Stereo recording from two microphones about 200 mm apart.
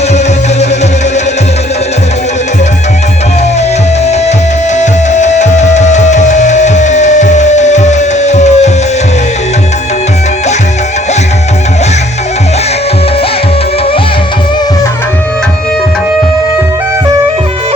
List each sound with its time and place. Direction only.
4.8 s music: 35° left (ahead or behind)